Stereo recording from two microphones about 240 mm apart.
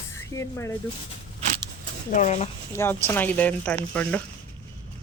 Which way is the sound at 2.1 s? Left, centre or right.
Left.